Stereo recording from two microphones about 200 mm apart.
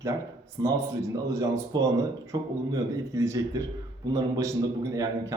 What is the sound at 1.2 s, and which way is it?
A man's voice, 15° right (ahead or behind).